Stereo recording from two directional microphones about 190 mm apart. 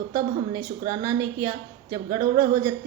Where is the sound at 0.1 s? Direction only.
15° right (ahead or behind).